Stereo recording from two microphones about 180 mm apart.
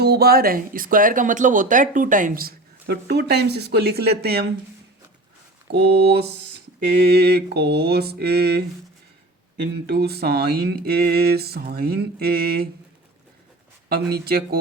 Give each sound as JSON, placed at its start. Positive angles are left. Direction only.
{"t": 0.0, "sound": "speech", "side_deg": -60}
{"t": 5.9, "sound": "speech", "side_deg": -65}
{"t": 9.8, "sound": "speech", "side_deg": -65}
{"t": 14.1, "sound": "speech", "side_deg": -60}